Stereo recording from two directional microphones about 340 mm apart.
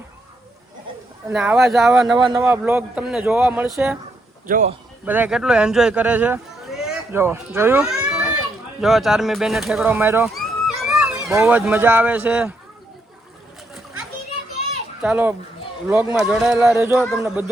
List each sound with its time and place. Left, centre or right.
1.3 s speech: centre
2.1 s speech: centre
4.4 s a man's voice: right
5.0 s speech: centre
15.0 s speech: centre